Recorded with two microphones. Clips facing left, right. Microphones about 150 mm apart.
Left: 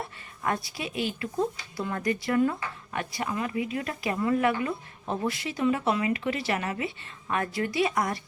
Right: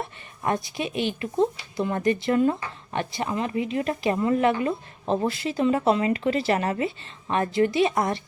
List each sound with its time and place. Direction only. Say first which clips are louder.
0.4 s speech: right 4 dB; 20° right (ahead or behind)